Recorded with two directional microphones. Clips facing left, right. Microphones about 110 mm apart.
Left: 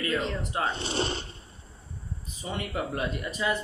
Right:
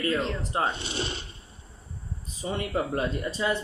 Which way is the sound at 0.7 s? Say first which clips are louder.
Left 3 dB; 35° left (ahead or behind).